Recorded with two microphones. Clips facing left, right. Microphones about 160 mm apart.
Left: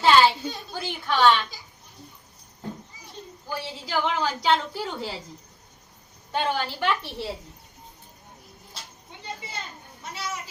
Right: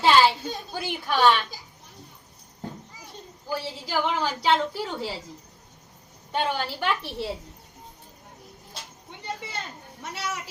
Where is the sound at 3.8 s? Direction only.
5° right (ahead or behind).